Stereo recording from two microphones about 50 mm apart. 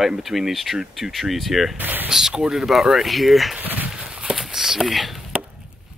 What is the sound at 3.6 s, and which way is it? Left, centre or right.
Walk, right.